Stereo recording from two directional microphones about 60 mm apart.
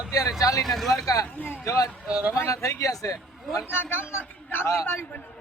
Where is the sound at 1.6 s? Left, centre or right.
Left.